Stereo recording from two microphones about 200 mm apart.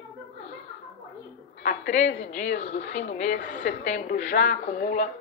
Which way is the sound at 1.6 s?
40° left (ahead or behind).